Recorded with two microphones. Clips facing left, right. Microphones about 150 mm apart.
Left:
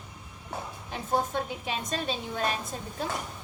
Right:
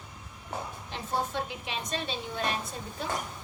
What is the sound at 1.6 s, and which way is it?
Speech, 45° left (ahead or behind).